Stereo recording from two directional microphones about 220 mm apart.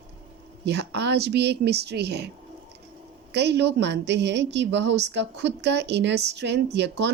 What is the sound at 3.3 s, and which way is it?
Speech, 50° right (ahead or behind).